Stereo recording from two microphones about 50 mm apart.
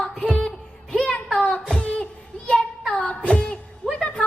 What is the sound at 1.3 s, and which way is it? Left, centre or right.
Singing, centre.